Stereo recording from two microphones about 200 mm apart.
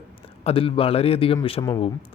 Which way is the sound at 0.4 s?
30° left (ahead or behind).